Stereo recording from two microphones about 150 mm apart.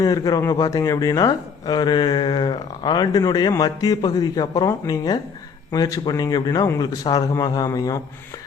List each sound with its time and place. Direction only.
0.0 s speech: 25° left (ahead or behind)